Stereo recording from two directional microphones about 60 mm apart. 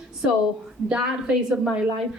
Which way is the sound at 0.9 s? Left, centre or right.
Centre.